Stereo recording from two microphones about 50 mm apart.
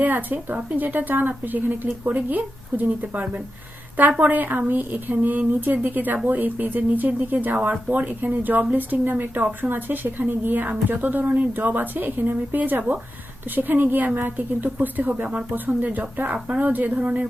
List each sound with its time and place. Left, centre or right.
0.0 s a woman's voice: right